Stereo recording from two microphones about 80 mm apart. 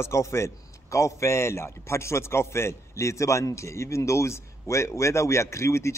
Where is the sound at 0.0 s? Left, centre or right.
Left.